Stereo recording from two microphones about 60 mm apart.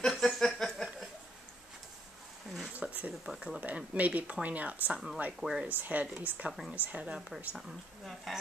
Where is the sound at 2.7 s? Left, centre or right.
Right.